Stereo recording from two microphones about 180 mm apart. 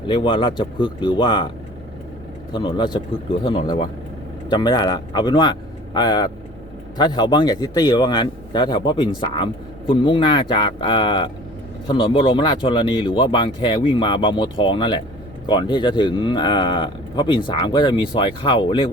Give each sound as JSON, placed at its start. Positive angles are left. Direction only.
{"t": 0.1, "sound": "a man's voice", "side_deg": 25}
{"t": 2.5, "sound": "a man's voice", "side_deg": 25}